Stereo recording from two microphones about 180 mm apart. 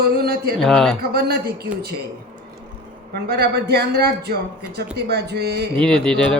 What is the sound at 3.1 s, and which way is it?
Speech, 60° right (ahead or behind).